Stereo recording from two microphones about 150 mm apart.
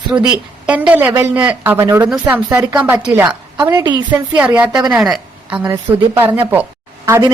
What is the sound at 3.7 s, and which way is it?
Speech, 25° right (ahead or behind).